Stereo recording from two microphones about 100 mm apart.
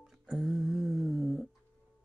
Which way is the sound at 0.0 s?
5° right (ahead or behind).